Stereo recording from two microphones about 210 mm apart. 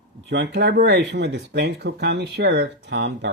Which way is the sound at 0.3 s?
55° right (ahead or behind).